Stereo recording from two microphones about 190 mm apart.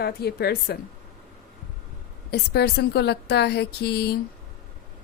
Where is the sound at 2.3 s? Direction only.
60° left (ahead or behind).